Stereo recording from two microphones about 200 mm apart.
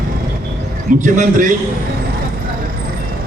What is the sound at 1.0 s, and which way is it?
Speech, 40° right (ahead or behind).